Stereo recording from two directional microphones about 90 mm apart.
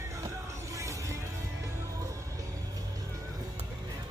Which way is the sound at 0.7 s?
35° right (ahead or behind).